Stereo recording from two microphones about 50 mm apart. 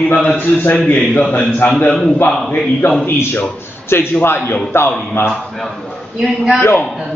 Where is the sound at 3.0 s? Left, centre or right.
Left.